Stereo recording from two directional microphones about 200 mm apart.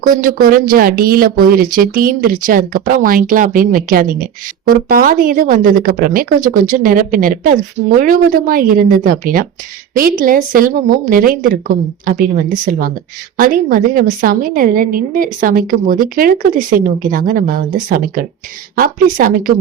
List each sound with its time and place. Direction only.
0.0 s speech: 45° right (ahead or behind)